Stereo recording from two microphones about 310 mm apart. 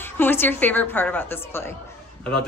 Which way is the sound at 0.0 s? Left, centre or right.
Centre.